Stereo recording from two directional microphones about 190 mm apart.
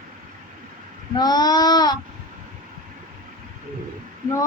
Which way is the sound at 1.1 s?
20° left (ahead or behind).